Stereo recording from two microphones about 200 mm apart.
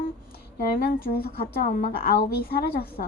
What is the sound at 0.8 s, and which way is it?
A woman's voice, 50° left (ahead or behind).